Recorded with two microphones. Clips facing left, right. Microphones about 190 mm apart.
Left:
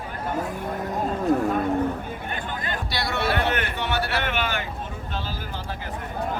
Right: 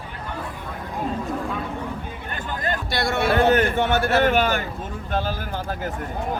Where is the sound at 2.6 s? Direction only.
45° right (ahead or behind).